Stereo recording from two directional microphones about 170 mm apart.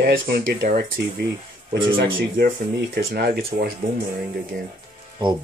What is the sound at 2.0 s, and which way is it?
Speech, 70° right (ahead or behind).